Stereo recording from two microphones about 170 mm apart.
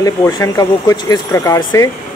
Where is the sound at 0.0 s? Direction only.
20° left (ahead or behind).